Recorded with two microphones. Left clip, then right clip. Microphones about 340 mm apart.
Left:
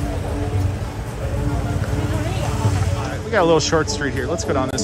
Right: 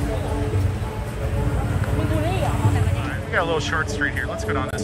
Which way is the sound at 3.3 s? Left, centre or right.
Centre.